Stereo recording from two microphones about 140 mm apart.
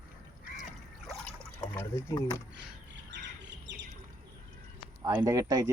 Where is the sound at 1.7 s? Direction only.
25° left (ahead or behind).